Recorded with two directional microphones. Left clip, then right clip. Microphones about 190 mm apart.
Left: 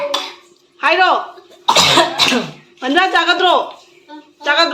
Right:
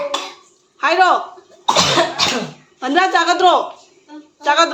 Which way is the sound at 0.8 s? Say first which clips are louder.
Left 1 dB; centre (ahead or behind).